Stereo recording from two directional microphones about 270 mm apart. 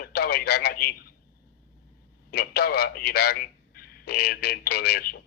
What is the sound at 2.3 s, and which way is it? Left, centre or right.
A man's voice, left.